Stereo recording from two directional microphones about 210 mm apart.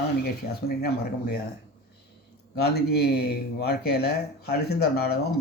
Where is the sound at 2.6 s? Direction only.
50° left (ahead or behind).